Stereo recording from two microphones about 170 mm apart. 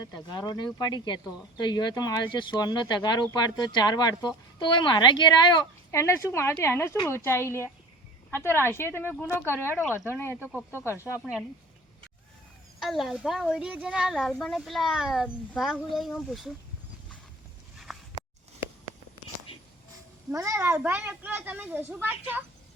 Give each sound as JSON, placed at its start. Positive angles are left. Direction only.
{"t": 0.1, "sound": "a woman's voice", "side_deg": 25}
{"t": 10.4, "sound": "speech", "side_deg": -10}
{"t": 10.8, "sound": "a woman's voice", "side_deg": 15}
{"t": 12.8, "sound": "speech", "side_deg": 0}
{"t": 17.9, "sound": "a sound", "side_deg": 0}
{"t": 20.3, "sound": "speech", "side_deg": -20}